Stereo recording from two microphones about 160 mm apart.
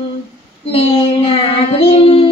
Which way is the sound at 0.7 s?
35° left (ahead or behind).